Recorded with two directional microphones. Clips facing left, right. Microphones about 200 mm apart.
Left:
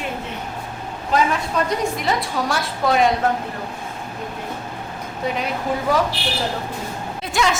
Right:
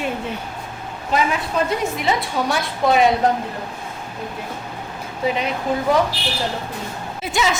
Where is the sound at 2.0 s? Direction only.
Centre (ahead or behind).